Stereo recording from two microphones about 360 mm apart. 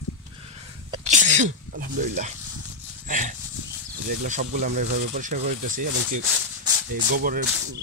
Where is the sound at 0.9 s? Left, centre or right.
Centre.